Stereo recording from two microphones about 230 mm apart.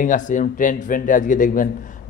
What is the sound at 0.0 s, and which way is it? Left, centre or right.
Speech, left.